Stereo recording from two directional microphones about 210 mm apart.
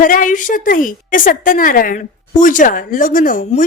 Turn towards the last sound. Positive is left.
turn(degrees=40)  # may be behind; listen again after turning